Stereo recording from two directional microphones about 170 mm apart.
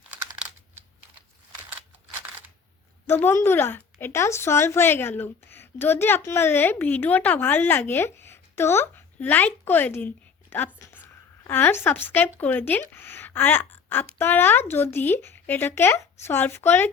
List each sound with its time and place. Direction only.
3.1 s speech: 15° left (ahead or behind)
10.8 s a sound: 15° left (ahead or behind)
12.4 s speech: 10° left (ahead or behind)